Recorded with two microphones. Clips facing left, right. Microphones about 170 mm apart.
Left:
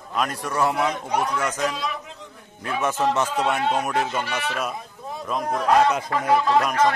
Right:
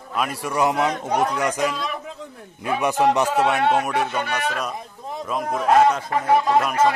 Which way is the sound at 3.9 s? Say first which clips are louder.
Right 1 dB; 60° right (ahead or behind).